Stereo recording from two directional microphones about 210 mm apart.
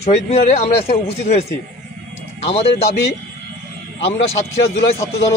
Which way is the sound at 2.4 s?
30° left (ahead or behind).